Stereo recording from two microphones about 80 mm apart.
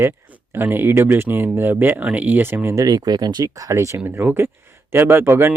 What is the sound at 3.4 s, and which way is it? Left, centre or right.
Speech, right.